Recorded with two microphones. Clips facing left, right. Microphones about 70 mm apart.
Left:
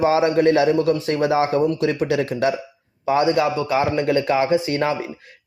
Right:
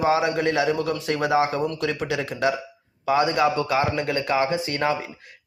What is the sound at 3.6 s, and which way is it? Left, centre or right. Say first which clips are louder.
Speech: left 2 dB; centre.